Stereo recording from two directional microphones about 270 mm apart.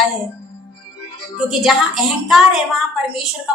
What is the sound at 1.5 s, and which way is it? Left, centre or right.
A woman's voice, centre.